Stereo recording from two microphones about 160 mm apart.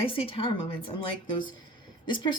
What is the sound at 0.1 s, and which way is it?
Speech, 35° left (ahead or behind).